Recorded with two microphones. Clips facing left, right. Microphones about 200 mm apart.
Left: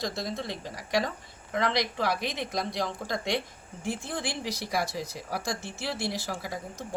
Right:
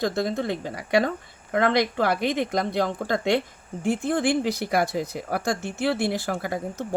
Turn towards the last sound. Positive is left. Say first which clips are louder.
# right 8 dB
turn(degrees=-55)  # may be behind; listen again after turning